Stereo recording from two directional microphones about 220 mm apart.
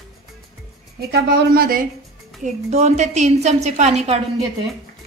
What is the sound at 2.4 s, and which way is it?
A woman's voice, 30° right (ahead or behind).